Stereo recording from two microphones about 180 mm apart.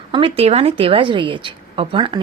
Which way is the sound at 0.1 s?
30° right (ahead or behind).